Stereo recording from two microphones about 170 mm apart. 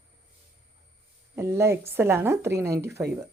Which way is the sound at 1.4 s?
15° right (ahead or behind).